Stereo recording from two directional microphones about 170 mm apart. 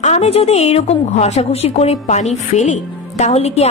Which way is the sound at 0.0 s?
40° left (ahead or behind).